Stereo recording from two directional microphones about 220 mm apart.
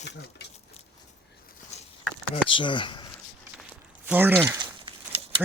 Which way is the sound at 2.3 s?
25° left (ahead or behind).